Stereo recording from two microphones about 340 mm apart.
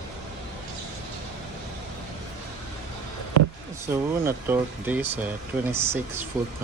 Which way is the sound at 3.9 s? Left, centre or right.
Centre.